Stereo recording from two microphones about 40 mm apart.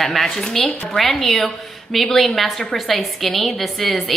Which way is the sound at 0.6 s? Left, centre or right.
Left.